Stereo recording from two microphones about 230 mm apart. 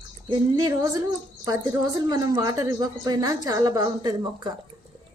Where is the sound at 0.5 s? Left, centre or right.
Centre.